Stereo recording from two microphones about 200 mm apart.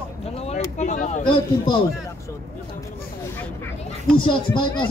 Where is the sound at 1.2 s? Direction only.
25° left (ahead or behind).